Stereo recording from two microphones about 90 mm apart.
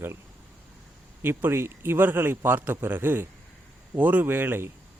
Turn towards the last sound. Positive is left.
turn(degrees=-25)  # may be behind; listen again after turning